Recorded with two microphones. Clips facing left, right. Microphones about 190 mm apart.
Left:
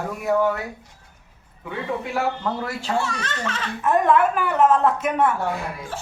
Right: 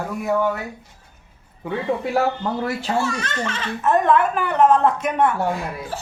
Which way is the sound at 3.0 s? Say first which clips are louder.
Right 3 dB; centre (ahead or behind).